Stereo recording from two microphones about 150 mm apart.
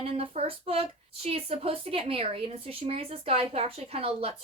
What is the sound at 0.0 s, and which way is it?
A woman's voice, 40° right (ahead or behind).